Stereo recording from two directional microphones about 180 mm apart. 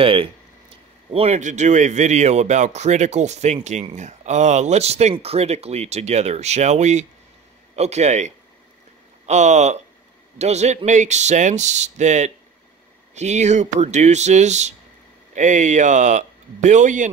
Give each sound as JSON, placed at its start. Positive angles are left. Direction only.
{"t": 0.0, "sound": "speech", "side_deg": -30}